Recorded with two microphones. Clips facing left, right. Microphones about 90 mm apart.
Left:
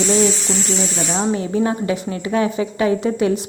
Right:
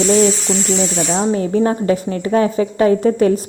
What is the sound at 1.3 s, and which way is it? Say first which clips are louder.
A woman's voice: right 3 dB; 40° right (ahead or behind).